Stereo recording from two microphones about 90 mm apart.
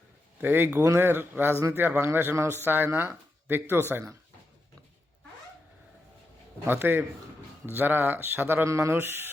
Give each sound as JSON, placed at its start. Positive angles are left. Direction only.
{"t": 0.4, "sound": "speech", "side_deg": -20}
{"t": 6.7, "sound": "speech", "side_deg": -25}